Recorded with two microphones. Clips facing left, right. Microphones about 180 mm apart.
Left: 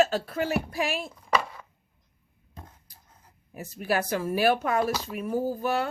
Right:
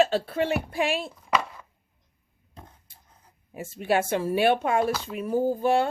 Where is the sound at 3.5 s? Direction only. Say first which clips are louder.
Right 3 dB; 25° right (ahead or behind).